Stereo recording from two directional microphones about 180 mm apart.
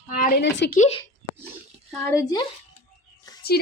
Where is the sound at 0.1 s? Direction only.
50° left (ahead or behind); by 0.7 s 70° left (ahead or behind).